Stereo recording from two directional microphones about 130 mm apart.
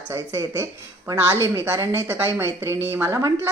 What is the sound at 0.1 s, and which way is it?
A woman's voice, 20° right (ahead or behind).